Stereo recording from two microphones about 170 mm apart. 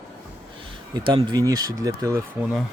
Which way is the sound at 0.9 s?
25° right (ahead or behind).